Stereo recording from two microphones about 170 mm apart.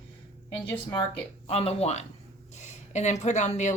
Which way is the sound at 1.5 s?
35° left (ahead or behind).